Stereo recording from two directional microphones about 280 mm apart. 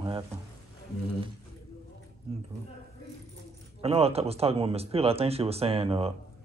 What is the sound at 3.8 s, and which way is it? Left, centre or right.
Speech, right.